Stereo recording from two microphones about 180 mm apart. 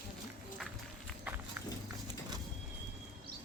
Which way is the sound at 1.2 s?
10° right (ahead or behind).